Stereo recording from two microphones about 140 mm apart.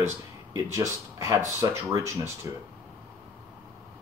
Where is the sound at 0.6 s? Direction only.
25° right (ahead or behind).